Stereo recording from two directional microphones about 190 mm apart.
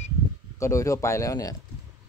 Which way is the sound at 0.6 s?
15° left (ahead or behind).